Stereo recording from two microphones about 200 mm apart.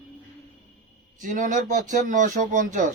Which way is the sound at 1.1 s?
40° right (ahead or behind).